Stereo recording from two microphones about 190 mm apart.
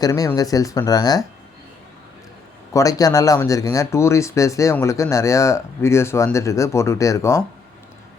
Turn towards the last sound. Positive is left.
turn(degrees=15)  # may be behind; listen again after turning